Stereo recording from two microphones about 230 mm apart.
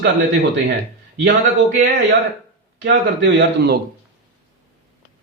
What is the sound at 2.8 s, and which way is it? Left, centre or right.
Speech, right.